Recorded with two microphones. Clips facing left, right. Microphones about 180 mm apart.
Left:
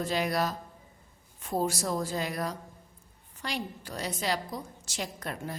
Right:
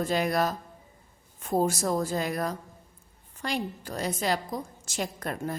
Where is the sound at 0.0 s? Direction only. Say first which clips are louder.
Right 3 dB; 50° right (ahead or behind).